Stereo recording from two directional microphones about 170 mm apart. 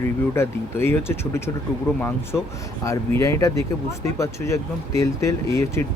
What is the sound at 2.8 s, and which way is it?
Speech, 20° left (ahead or behind).